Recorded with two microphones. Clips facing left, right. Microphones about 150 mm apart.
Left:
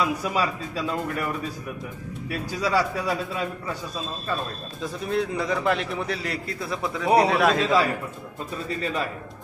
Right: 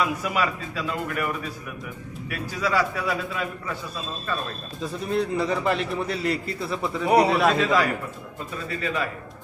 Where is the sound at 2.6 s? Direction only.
35° left (ahead or behind).